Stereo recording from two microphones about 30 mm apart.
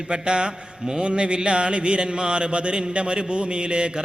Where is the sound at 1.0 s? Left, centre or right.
Right.